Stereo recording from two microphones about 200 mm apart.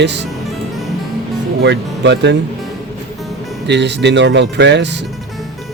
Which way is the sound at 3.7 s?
60° right (ahead or behind).